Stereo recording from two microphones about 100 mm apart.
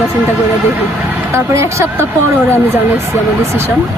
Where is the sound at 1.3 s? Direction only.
25° right (ahead or behind).